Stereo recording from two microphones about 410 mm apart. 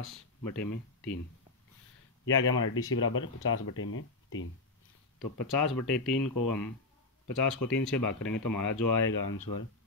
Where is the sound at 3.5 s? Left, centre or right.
Left.